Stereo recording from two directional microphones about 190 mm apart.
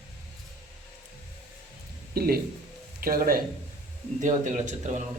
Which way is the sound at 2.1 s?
50° right (ahead or behind).